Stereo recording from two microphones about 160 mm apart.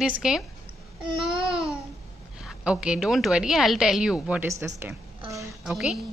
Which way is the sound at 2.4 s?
5° right (ahead or behind).